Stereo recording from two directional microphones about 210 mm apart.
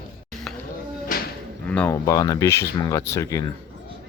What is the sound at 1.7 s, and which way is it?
Speech, 10° left (ahead or behind).